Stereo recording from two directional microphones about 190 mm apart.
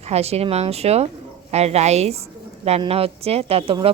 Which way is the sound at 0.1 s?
35° right (ahead or behind).